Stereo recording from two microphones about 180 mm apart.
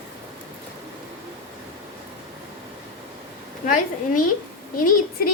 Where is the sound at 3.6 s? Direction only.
45° left (ahead or behind).